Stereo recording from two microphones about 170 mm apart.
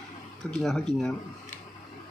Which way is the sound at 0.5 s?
Centre (ahead or behind).